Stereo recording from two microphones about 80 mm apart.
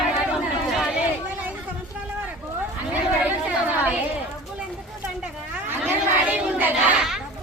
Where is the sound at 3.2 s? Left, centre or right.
Centre.